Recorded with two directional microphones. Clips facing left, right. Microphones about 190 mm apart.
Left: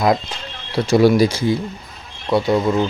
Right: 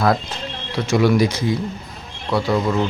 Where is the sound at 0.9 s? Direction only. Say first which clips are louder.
Left 3 dB; 35° left (ahead or behind).